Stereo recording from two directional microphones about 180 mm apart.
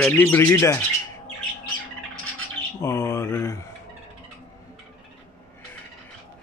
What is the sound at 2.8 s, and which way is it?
Speech, 15° left (ahead or behind).